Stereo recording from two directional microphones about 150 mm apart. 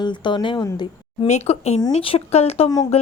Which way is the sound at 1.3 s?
45° left (ahead or behind).